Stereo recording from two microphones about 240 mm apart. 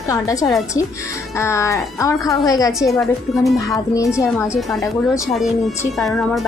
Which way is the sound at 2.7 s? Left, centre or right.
Centre.